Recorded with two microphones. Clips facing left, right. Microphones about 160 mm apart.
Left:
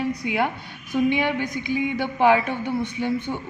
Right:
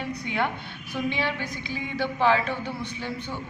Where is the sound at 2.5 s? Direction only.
50° left (ahead or behind).